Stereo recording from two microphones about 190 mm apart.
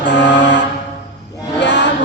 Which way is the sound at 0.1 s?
65° left (ahead or behind).